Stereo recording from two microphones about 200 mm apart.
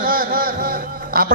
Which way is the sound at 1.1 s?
50° right (ahead or behind).